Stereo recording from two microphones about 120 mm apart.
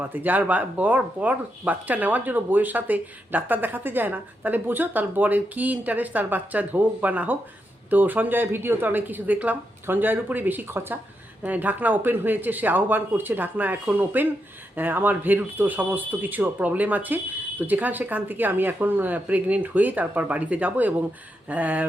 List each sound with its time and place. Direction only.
0.0 s speech: 15° right (ahead or behind)